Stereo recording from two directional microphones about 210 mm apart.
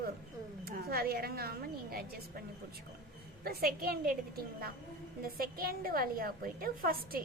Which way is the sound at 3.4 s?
45° right (ahead or behind).